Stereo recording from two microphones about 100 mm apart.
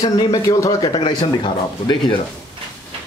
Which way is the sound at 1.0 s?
50° left (ahead or behind).